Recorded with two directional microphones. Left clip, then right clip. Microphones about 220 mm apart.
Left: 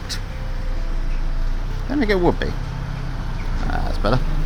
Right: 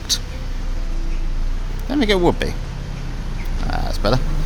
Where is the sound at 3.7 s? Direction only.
5° right (ahead or behind).